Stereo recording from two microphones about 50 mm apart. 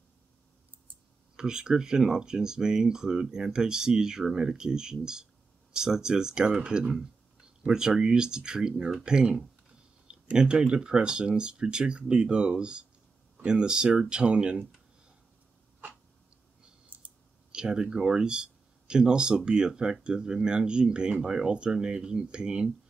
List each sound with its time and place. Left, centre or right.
1.3 s speech: centre
16.9 s clicking: right
17.5 s speech: centre